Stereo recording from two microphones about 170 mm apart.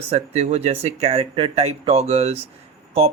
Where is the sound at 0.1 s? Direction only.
40° right (ahead or behind).